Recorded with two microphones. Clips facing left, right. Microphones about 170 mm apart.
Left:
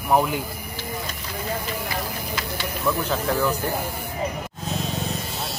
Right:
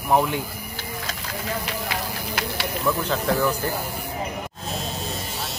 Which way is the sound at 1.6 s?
75° right (ahead or behind).